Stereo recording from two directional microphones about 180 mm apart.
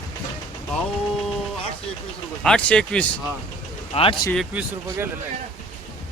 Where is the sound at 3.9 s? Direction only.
30° left (ahead or behind).